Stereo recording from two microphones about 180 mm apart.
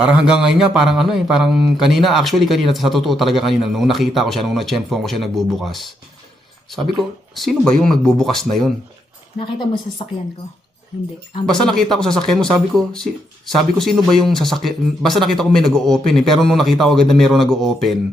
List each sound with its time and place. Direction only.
0.1 s speech: 5° right (ahead or behind)
6.9 s speech: centre (ahead or behind)
9.4 s speech: 30° left (ahead or behind)
11.4 s speech: 5° left (ahead or behind)